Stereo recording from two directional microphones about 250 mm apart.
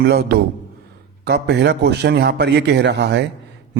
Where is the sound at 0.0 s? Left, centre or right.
Right.